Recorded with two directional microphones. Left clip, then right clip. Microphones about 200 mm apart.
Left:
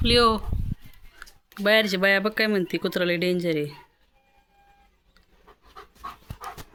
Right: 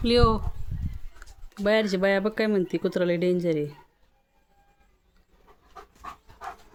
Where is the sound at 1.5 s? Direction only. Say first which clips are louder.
Left 3 dB; 5° right (ahead or behind).